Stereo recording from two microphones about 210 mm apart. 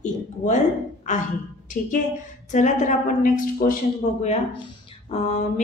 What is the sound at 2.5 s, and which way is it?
Speech, 35° left (ahead or behind).